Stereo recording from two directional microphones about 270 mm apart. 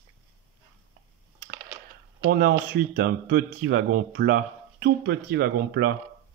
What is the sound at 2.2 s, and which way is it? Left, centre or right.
Speech, right.